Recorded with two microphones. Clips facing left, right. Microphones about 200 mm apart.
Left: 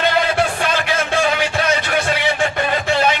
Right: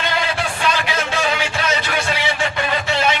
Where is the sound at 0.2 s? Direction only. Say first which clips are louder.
Left 5 dB; 50° left (ahead or behind).